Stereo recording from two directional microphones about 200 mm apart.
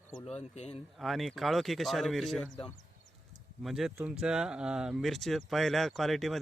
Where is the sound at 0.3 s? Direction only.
30° left (ahead or behind).